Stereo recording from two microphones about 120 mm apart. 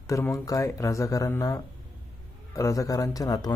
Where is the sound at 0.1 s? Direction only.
25° left (ahead or behind).